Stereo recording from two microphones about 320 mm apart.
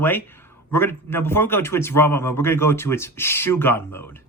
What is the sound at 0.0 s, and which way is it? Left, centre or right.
Speech, centre.